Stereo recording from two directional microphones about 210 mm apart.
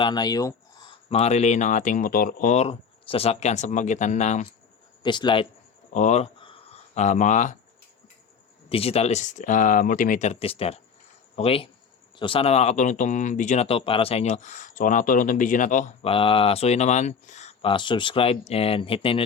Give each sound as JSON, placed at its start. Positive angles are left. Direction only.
{"t": 0.0, "sound": "speech", "side_deg": 20}
{"t": 5.0, "sound": "speech", "side_deg": 20}
{"t": 5.9, "sound": "speech", "side_deg": 35}
{"t": 8.7, "sound": "speech", "side_deg": 30}